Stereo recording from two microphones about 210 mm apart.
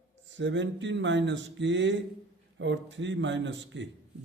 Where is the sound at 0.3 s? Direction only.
60° right (ahead or behind).